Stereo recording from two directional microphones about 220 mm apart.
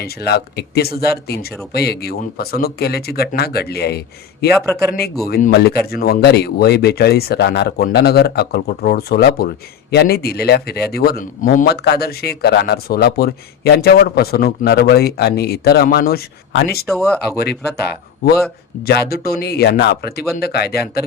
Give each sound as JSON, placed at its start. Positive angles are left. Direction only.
{"t": 0.0, "sound": "speech", "side_deg": 45}
{"t": 4.5, "sound": "speech", "side_deg": 5}
{"t": 5.2, "sound": "speech", "side_deg": 45}
{"t": 16.8, "sound": "speech", "side_deg": 0}
{"t": 17.3, "sound": "speech", "side_deg": 45}